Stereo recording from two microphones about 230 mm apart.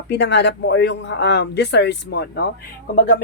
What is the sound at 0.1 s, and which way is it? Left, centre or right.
Speech, left.